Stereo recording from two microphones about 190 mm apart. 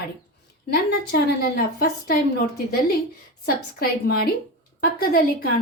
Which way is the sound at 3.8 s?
55° left (ahead or behind).